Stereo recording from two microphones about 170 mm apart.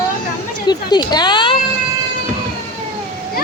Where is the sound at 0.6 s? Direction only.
25° left (ahead or behind).